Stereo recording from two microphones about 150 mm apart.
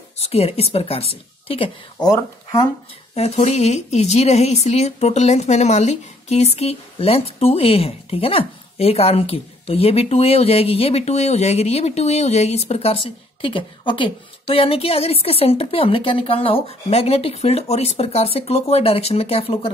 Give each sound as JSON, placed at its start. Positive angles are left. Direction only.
{"t": 0.2, "sound": "a woman's voice", "side_deg": 40}
{"t": 2.0, "sound": "speech", "side_deg": 25}
{"t": 3.2, "sound": "speech", "side_deg": 45}